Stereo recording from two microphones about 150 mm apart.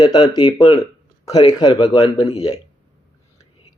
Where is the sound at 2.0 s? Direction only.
45° left (ahead or behind).